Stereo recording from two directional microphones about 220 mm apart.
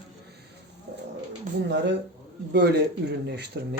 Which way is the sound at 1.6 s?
50° right (ahead or behind).